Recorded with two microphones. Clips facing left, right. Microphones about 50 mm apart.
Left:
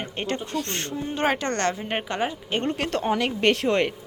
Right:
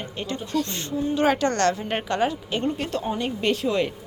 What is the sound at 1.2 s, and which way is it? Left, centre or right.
A woman's voice, left.